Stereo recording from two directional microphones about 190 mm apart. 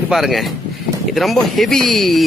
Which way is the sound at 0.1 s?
Centre (ahead or behind).